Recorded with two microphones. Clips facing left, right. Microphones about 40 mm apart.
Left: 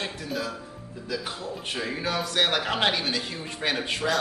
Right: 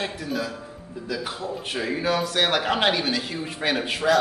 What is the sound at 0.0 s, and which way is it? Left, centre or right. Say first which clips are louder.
A man's voice: right 3 dB; centre.